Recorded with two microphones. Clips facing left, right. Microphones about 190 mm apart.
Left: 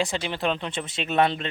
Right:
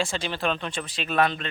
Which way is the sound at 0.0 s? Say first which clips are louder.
Left 1 dB; 20° left (ahead or behind).